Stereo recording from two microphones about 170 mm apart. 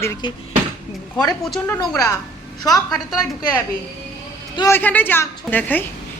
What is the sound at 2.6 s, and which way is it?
Speech, 20° left (ahead or behind).